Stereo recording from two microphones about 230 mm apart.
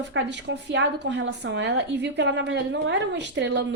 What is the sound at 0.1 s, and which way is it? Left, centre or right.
A woman's voice, right.